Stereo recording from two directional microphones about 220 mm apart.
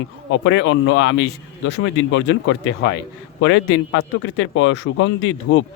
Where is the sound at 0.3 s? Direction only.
55° left (ahead or behind).